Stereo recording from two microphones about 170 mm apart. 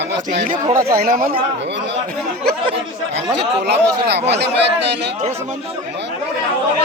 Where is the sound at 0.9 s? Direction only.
60° right (ahead or behind).